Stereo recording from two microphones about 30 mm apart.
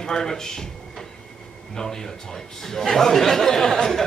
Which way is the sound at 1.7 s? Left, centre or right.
Centre.